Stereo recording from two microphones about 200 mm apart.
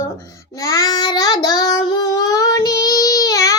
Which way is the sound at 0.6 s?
15° left (ahead or behind).